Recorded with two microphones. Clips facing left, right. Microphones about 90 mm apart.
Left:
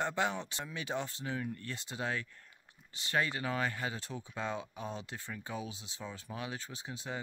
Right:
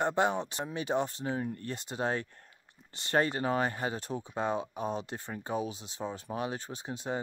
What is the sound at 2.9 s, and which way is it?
Speech, 55° right (ahead or behind).